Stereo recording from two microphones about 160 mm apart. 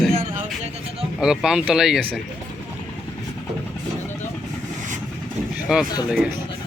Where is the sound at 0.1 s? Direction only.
40° right (ahead or behind).